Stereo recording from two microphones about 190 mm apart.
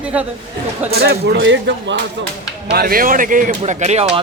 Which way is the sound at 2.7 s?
50° right (ahead or behind).